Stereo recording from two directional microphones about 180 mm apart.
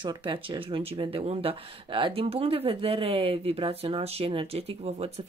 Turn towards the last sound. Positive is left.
turn(degrees=-35)  # may be behind; listen again after turning